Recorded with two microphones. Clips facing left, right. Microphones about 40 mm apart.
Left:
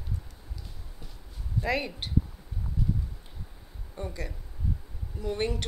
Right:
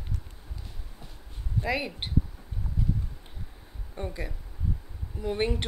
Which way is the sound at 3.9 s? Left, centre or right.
Centre.